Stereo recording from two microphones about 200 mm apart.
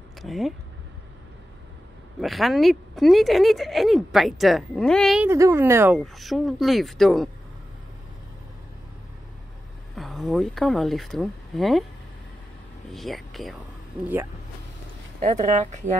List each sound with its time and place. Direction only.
0.2 s speech: centre (ahead or behind)
2.1 s speech: centre (ahead or behind)
5.2 s speech: 15° right (ahead or behind)
9.9 s speech: centre (ahead or behind)
12.9 s speech: centre (ahead or behind)
15.1 s speech: 35° right (ahead or behind)